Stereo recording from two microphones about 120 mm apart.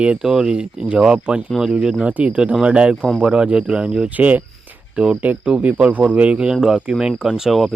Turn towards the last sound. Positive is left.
turn(degrees=0)  # may be behind; listen again after turning